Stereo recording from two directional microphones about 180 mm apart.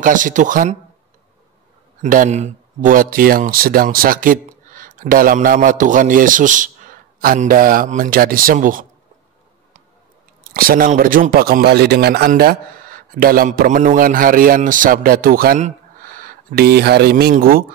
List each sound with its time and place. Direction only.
0.0 s speech: 45° right (ahead or behind)
2.0 s speech: 45° right (ahead or behind)
10.5 s speech: 55° right (ahead or behind)